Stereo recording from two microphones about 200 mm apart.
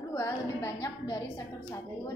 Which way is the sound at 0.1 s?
15° left (ahead or behind).